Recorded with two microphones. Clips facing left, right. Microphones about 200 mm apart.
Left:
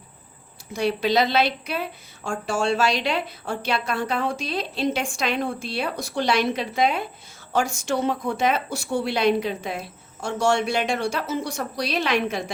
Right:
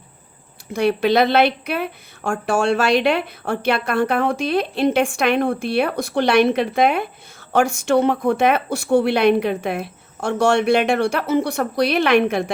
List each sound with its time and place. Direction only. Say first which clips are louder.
0.7 s a woman's voice: right 5 dB; 60° right (ahead or behind)